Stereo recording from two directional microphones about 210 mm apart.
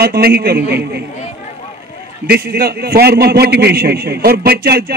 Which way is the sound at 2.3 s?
45° right (ahead or behind).